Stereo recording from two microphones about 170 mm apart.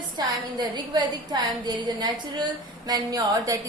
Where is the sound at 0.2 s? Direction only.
25° right (ahead or behind).